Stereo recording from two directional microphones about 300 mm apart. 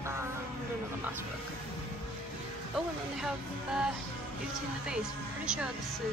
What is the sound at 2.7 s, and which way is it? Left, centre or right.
A woman's voice, centre.